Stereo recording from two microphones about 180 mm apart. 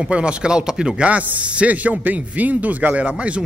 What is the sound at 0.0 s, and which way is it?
A man's voice, 5° right (ahead or behind).